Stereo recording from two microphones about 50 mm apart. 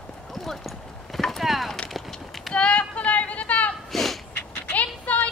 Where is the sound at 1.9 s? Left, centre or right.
Centre.